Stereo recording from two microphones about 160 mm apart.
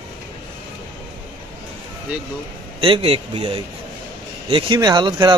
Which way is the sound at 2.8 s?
35° right (ahead or behind).